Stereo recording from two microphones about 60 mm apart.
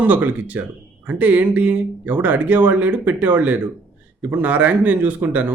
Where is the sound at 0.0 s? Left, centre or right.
Right.